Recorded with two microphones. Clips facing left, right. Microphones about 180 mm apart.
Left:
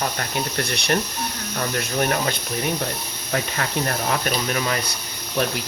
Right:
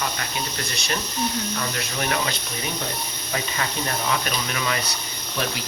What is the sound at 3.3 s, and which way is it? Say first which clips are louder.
Speech: left 3 dB; 55° left (ahead or behind).